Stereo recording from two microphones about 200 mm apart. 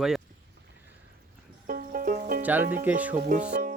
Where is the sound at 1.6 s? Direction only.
45° right (ahead or behind).